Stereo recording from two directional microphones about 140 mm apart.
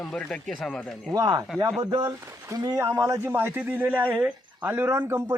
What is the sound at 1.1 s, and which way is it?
Speech, 30° right (ahead or behind).